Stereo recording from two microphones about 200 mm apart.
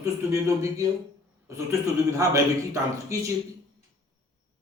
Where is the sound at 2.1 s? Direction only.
15° right (ahead or behind).